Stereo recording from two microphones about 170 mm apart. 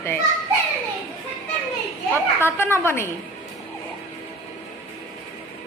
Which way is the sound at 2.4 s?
15° left (ahead or behind).